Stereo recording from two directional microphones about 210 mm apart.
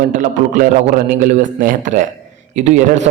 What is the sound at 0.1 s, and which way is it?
A man's voice, 40° right (ahead or behind).